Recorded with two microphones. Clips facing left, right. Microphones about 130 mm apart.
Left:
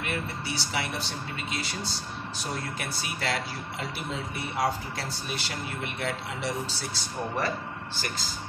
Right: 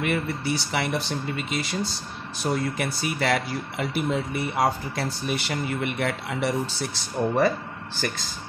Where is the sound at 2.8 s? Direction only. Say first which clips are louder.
Right 7 dB; 60° right (ahead or behind).